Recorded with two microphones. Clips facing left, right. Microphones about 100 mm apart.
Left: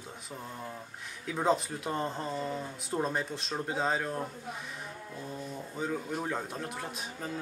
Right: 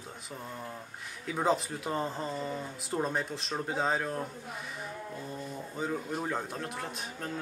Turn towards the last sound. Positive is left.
turn(degrees=0)  # may be behind; listen again after turning